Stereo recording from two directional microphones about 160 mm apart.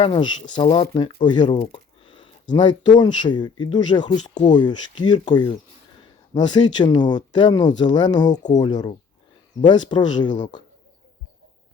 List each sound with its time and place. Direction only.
0.0 s speech: 30° left (ahead or behind)